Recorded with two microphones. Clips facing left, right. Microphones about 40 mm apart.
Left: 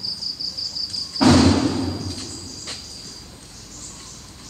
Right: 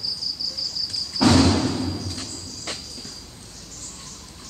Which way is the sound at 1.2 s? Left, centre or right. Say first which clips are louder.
Left 3 dB; centre.